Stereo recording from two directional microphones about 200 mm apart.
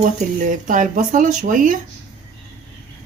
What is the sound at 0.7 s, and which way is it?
Speech, 40° right (ahead or behind).